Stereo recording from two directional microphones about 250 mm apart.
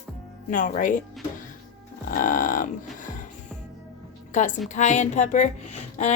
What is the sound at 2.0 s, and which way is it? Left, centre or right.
Music, left.